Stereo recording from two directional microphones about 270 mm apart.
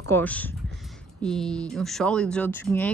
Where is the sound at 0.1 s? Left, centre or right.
Centre.